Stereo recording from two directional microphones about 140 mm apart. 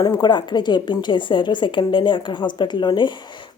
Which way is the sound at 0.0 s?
30° left (ahead or behind).